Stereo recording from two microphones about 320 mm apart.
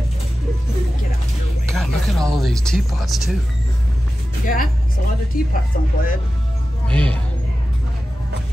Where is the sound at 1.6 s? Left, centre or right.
Centre.